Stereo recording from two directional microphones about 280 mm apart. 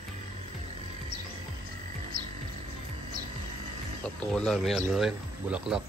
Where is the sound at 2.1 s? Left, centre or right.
Right.